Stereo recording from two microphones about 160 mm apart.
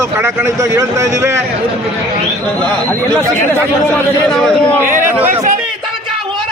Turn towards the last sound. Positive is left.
turn(degrees=-10)  # may be behind; listen again after turning